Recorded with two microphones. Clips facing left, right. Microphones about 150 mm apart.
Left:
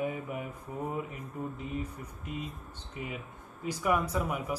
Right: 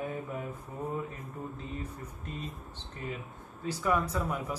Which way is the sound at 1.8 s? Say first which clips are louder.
Left 2 dB; 10° left (ahead or behind).